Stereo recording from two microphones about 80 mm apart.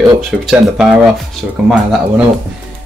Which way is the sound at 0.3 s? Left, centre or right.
Centre.